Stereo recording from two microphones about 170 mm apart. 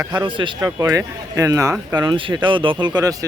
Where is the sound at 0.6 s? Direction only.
15° right (ahead or behind).